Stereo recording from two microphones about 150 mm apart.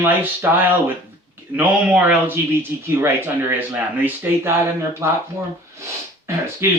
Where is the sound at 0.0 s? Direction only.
15° right (ahead or behind).